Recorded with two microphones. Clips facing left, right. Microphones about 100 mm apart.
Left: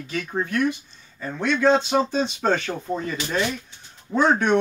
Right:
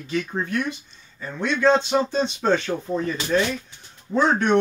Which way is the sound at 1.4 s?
5° left (ahead or behind).